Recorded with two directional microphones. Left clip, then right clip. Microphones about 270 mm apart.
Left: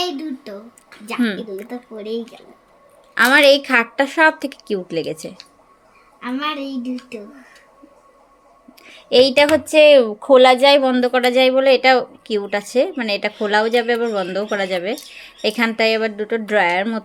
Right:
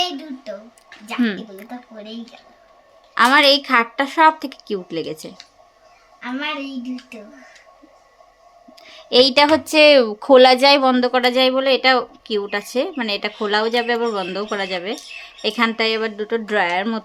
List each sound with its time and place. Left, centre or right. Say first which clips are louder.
1.0 s a woman's voice: left 1 dB; centre
3.2 s a woman's voice: left 1 dB; centre
5.1 s speech: left 2 dB; centre
6.1 s a woman's voice: left 2 dB; centre
8.8 s a woman's voice: left 1 dB; centre